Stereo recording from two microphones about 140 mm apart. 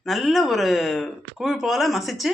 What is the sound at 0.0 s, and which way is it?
Speech, centre (ahead or behind).